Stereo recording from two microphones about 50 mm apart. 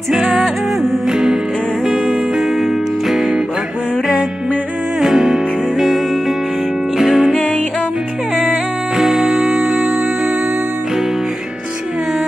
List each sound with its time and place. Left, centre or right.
0.1 s music: centre
1.9 s music: right
2.6 s music: centre
5.0 s music: centre
8.9 s music: centre